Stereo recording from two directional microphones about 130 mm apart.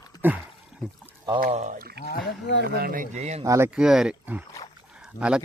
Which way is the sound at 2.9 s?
75° right (ahead or behind).